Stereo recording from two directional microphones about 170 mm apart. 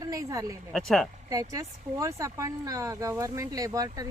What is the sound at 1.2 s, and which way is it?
Speech, 20° right (ahead or behind).